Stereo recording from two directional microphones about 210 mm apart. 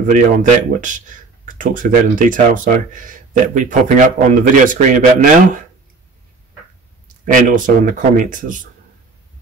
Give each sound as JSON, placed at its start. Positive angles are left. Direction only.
{"t": 0.0, "sound": "speech", "side_deg": -35}
{"t": 7.2, "sound": "speech", "side_deg": -40}